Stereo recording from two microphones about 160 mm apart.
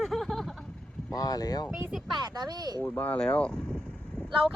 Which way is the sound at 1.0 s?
25° left (ahead or behind).